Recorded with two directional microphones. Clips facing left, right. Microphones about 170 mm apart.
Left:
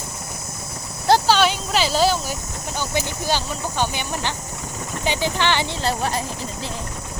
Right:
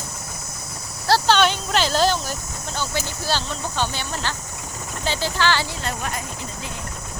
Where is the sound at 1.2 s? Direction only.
5° left (ahead or behind).